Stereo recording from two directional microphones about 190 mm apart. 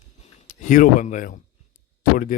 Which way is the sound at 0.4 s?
45° left (ahead or behind).